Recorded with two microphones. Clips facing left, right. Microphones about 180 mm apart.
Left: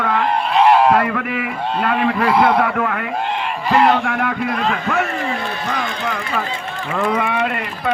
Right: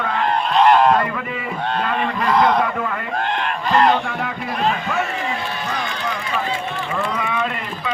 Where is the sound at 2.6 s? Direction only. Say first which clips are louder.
Left 3 dB; 60° left (ahead or behind).